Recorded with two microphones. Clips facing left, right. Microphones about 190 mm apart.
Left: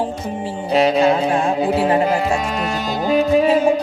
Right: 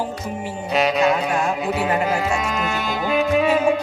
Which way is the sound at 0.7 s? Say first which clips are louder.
Left 4 dB; 30° left (ahead or behind).